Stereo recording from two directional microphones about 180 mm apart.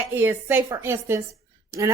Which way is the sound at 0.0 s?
10° right (ahead or behind).